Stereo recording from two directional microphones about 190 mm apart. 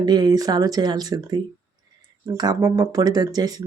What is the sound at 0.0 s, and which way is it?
Speech, 20° right (ahead or behind).